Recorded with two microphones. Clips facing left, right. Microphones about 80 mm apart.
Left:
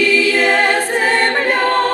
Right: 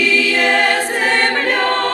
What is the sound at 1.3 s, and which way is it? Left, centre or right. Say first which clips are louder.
Choir: left 2 dB; left.